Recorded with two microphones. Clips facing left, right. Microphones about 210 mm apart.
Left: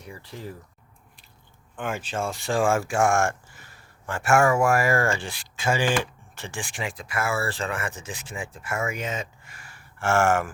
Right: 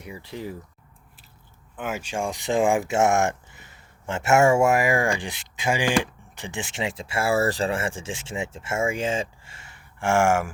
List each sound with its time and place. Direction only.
0.0 s speech: 15° right (ahead or behind)
1.7 s speech: 5° right (ahead or behind)